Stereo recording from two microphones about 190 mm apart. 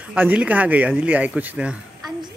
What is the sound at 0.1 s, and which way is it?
Speech, 5° right (ahead or behind).